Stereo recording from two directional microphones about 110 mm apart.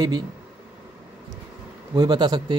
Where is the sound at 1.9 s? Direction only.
40° right (ahead or behind).